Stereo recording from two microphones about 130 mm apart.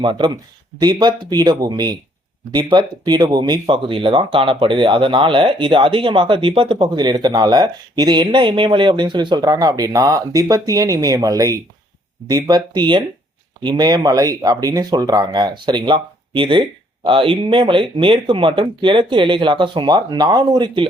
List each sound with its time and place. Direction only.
0.0 s speech: 35° right (ahead or behind)